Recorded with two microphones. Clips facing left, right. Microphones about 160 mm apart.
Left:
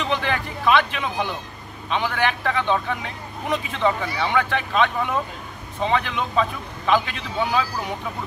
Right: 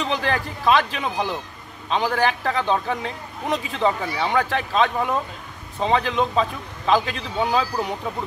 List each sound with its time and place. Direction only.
0.0 s a man's voice: 35° right (ahead or behind)